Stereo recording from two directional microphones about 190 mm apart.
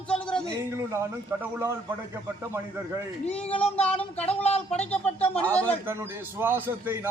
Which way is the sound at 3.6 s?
5° left (ahead or behind).